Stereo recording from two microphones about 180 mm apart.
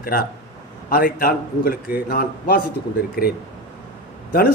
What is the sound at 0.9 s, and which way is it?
A man's voice, 55° left (ahead or behind).